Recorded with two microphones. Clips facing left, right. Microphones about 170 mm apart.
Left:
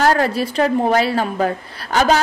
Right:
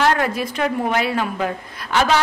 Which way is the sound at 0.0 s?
35° left (ahead or behind).